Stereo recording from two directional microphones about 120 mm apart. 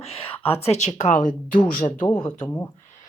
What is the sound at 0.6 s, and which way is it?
Speech, 65° left (ahead or behind).